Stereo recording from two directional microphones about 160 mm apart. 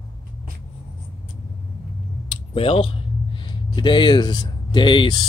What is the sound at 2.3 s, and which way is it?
Speech, 35° left (ahead or behind).